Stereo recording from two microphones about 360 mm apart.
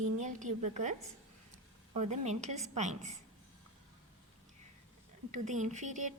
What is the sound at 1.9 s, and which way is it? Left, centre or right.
A woman's voice, centre.